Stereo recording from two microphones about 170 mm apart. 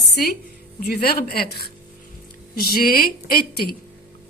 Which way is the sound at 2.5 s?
60° left (ahead or behind).